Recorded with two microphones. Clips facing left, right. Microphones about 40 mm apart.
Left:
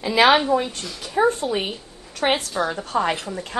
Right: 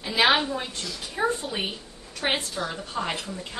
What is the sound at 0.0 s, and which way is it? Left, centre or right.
Speech, left.